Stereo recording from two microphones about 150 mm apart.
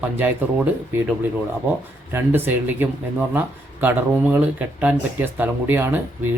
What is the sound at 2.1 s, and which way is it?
Speech, 15° right (ahead or behind).